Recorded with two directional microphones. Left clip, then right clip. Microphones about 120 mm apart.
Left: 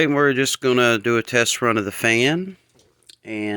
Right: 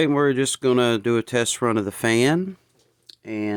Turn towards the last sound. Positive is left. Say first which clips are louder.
# left 1 dB
turn(degrees=-30)  # may be behind; listen again after turning